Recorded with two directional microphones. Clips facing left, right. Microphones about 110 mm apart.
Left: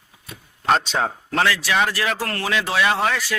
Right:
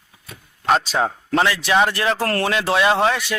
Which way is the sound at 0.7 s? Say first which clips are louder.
Right 1 dB; centre (ahead or behind).